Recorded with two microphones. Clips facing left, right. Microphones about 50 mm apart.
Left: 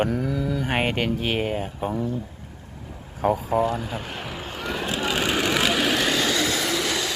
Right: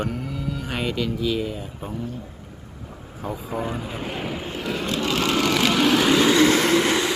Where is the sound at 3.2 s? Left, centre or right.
Left.